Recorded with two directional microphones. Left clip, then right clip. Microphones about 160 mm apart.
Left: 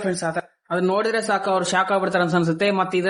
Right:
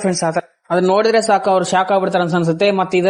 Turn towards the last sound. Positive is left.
turn(degrees=-25)  # may be behind; listen again after turning